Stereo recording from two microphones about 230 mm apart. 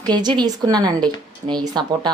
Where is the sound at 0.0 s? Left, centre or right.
Centre.